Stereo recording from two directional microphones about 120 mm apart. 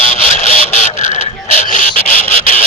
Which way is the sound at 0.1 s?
85° left.